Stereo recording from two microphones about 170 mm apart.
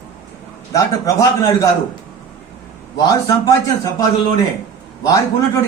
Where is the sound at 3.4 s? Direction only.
20° left (ahead or behind).